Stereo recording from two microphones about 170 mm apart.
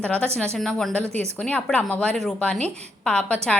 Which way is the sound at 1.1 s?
40° right (ahead or behind).